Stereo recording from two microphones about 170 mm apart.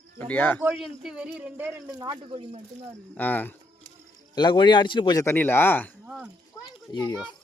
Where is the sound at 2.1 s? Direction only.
30° right (ahead or behind).